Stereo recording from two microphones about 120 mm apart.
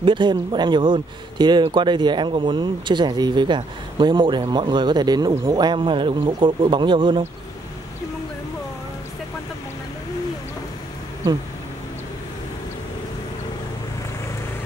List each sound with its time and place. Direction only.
0.0 s speech: 40° right (ahead or behind)